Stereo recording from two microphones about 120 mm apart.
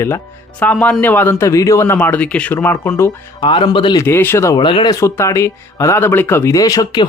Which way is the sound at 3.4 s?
45° left (ahead or behind).